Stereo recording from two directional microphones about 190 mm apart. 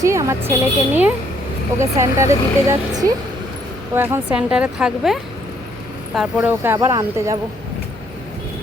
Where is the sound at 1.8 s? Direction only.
15° right (ahead or behind).